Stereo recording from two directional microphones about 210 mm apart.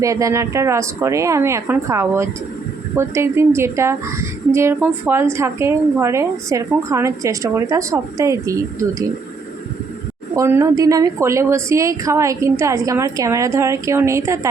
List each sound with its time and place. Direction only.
0.0 s a woman's voice: 15° right (ahead or behind)
10.3 s a woman's voice: 15° right (ahead or behind)